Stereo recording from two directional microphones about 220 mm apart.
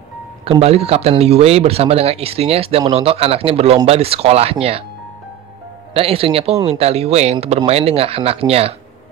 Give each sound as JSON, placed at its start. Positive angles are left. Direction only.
{"t": 0.5, "sound": "speech", "side_deg": -30}
{"t": 5.9, "sound": "speech", "side_deg": -25}